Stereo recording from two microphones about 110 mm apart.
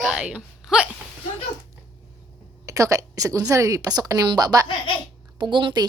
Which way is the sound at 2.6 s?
30° right (ahead or behind).